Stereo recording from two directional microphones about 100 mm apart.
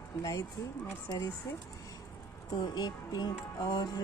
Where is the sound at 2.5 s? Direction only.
45° left (ahead or behind).